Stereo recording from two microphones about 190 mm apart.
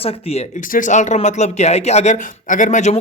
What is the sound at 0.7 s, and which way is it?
Speech, 45° left (ahead or behind).